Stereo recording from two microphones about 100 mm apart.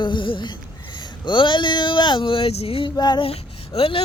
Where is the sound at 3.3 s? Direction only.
80° left.